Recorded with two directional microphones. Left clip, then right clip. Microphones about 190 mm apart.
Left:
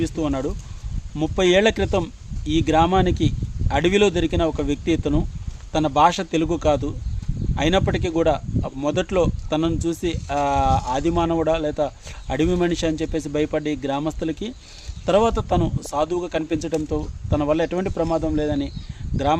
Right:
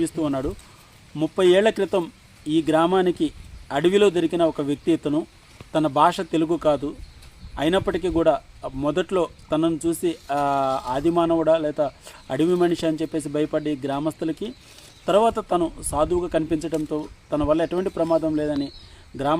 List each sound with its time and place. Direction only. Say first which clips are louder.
0.0 s speech: even; 15° left (ahead or behind)